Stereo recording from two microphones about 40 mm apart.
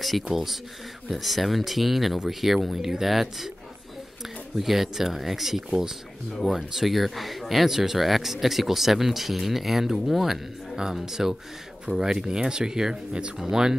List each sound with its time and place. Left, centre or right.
0.0 s speech: centre
4.6 s speech: centre